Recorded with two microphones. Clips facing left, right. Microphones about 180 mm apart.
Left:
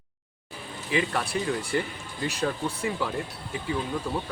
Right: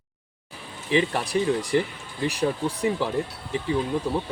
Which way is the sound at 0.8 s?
20° right (ahead or behind).